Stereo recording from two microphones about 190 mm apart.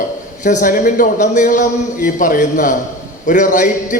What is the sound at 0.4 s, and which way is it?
A man's voice, 45° left (ahead or behind).